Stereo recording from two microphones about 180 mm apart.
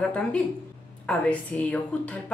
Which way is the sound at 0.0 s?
5° left (ahead or behind).